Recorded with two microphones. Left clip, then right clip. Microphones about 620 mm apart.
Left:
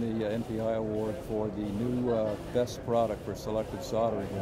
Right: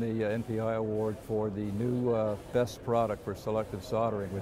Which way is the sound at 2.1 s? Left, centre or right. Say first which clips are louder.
Even; right.